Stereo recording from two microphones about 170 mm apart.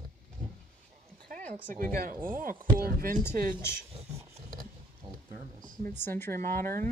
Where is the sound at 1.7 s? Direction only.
55° right (ahead or behind).